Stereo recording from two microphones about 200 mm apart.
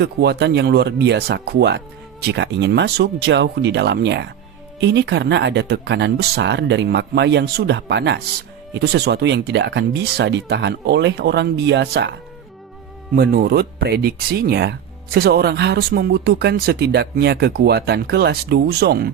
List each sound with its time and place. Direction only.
0.0 s speech: 55° right (ahead or behind)
13.1 s speech: 50° right (ahead or behind)